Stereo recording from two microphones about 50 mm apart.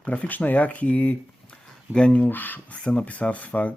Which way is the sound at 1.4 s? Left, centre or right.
Left.